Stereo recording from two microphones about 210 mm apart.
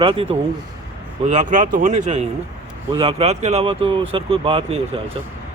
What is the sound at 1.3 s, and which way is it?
Speech, 35° right (ahead or behind).